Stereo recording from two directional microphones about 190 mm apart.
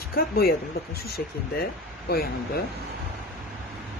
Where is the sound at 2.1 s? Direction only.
55° left (ahead or behind).